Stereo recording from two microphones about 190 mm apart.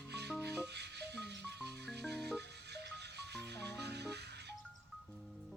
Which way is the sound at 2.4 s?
60° right (ahead or behind).